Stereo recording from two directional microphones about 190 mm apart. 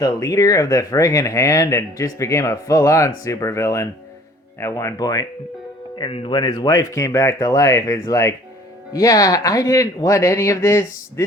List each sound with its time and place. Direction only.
0.0 s speech: 15° left (ahead or behind)